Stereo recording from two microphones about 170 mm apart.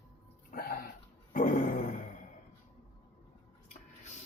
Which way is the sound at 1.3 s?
55° left (ahead or behind).